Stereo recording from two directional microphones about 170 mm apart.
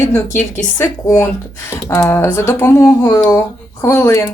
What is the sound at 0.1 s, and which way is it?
Speech, 10° left (ahead or behind).